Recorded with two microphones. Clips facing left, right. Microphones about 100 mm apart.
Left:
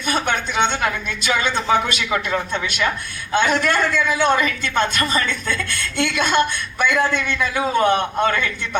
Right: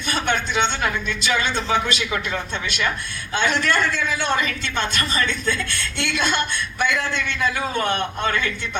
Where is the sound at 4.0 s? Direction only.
50° left (ahead or behind).